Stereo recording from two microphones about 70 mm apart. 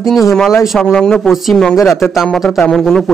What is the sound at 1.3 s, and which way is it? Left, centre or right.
Speech, centre.